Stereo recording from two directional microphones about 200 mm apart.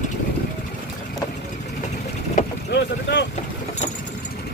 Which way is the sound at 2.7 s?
60° left (ahead or behind).